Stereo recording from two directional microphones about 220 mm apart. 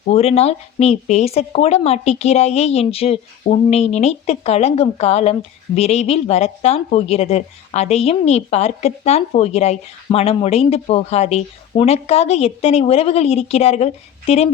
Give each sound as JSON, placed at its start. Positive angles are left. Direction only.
{"t": 0.1, "sound": "speech", "side_deg": 30}